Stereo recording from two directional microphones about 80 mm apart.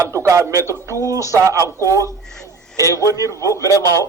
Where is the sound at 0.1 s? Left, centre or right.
Right.